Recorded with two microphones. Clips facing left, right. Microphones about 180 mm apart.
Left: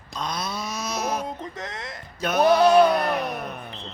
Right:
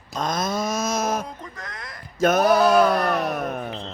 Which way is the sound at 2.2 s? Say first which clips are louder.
Right 4 dB; 45° right (ahead or behind).